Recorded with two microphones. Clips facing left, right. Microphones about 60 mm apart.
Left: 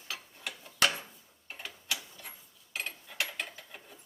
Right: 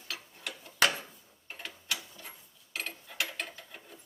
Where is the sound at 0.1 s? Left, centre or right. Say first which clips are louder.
Even; centre.